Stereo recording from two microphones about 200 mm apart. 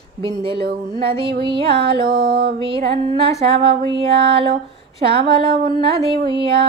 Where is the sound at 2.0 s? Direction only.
50° right (ahead or behind).